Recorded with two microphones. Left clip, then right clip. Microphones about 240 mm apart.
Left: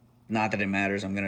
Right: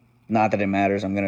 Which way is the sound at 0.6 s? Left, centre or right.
Right.